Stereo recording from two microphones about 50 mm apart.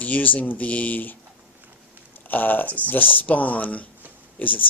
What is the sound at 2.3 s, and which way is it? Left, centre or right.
Speech, left.